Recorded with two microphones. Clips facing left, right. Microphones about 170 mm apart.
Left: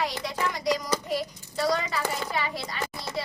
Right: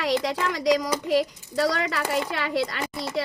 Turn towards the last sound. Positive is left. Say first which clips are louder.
# right 7 dB
turn(degrees=-90)